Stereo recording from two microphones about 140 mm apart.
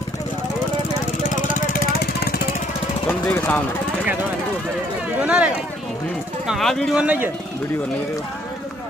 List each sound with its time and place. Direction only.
1.2 s vehicle: 70° left (ahead or behind)
3.1 s speech: 15° left (ahead or behind)
5.2 s a man's voice: 10° right (ahead or behind)